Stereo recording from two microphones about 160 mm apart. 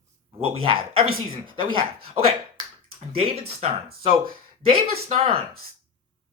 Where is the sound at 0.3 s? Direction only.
35° right (ahead or behind).